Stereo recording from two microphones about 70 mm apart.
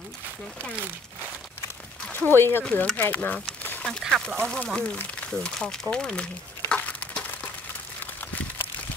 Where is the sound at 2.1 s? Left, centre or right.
Left.